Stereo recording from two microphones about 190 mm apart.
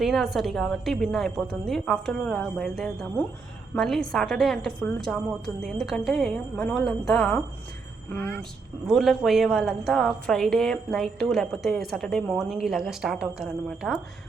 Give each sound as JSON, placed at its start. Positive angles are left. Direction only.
{"t": 0.0, "sound": "a woman's voice", "side_deg": 0}
{"t": 8.9, "sound": "a woman's voice", "side_deg": 0}